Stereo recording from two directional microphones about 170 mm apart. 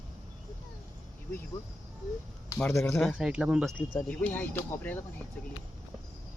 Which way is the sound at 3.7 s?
5° left (ahead or behind).